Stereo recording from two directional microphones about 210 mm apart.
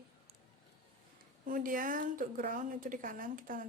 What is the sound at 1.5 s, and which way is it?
A woman's voice, 40° right (ahead or behind).